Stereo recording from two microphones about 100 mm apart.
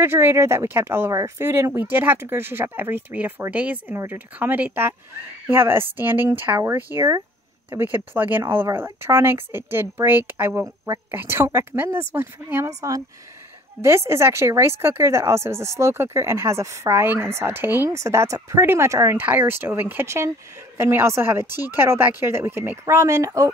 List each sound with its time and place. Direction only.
0.0 s speech: 25° right (ahead or behind)
17.8 s speech: 30° right (ahead or behind)